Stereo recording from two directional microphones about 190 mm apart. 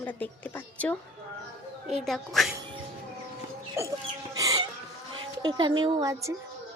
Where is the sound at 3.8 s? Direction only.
15° right (ahead or behind).